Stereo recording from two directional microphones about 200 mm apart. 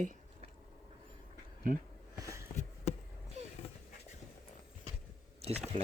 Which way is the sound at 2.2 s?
15° right (ahead or behind).